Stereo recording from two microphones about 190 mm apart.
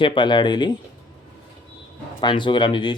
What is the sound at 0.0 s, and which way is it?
Speech, 25° left (ahead or behind).